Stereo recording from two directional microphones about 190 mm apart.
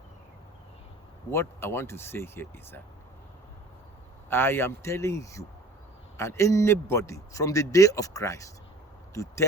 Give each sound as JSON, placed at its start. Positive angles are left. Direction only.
{"t": 1.3, "sound": "speech", "side_deg": 15}
{"t": 4.3, "sound": "speech", "side_deg": 10}